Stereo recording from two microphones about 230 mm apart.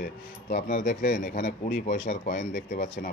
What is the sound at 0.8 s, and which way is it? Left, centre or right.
Speech, left.